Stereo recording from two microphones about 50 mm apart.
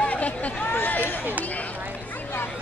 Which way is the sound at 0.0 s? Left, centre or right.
Left.